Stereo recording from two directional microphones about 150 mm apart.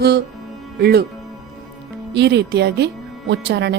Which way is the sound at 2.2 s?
90° right.